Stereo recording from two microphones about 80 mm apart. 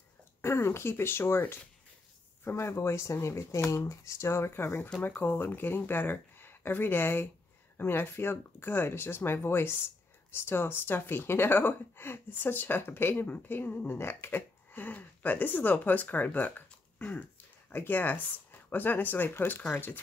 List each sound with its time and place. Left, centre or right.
0.4 s speech: left